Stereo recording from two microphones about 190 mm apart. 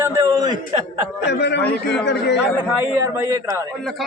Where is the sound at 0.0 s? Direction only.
15° right (ahead or behind).